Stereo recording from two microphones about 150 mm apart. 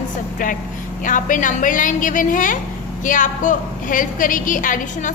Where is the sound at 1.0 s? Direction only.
60° left (ahead or behind).